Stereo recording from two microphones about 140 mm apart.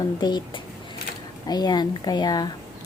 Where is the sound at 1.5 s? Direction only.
30° left (ahead or behind).